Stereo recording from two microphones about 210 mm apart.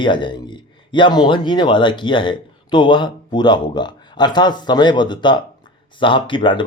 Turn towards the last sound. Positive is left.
turn(degrees=25)  # may be behind; listen again after turning